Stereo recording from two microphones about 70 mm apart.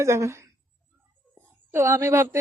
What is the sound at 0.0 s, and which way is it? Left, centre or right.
Speech, right.